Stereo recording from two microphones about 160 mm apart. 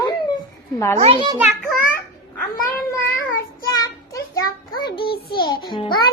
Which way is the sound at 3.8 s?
20° left (ahead or behind).